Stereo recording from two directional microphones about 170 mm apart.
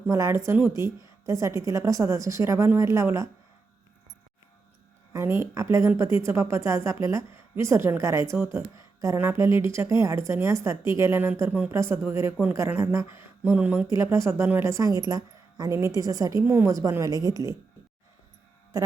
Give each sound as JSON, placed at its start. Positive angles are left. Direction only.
{"t": 0.1, "sound": "speech", "side_deg": -15}
{"t": 5.1, "sound": "speech", "side_deg": -15}